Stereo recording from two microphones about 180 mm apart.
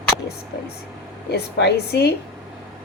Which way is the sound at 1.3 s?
65° left (ahead or behind).